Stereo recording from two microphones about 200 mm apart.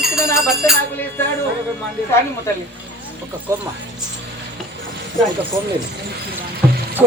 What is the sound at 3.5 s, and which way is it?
Speech, 15° right (ahead or behind).